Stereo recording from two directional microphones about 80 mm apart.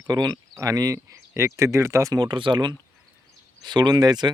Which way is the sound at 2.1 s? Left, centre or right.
Right.